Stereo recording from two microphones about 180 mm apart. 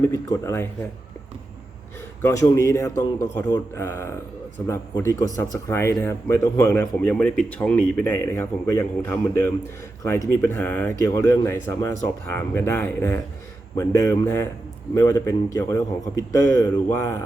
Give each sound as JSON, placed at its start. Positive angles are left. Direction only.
{"t": 0.0, "sound": "speech", "side_deg": 15}
{"t": 2.2, "sound": "speech", "side_deg": 20}